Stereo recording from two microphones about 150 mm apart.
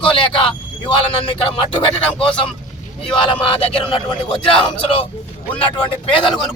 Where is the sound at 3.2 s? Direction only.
35° left (ahead or behind).